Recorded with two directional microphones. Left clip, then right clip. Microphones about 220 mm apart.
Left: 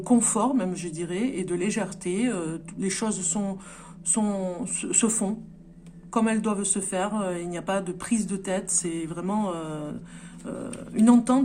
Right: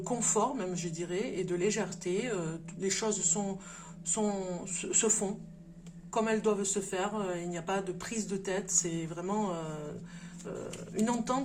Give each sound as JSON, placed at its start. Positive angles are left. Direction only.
{"t": 0.1, "sound": "speech", "side_deg": 50}
{"t": 6.1, "sound": "speech", "side_deg": 50}